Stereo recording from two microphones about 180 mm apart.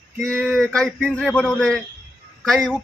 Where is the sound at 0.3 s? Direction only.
5° left (ahead or behind).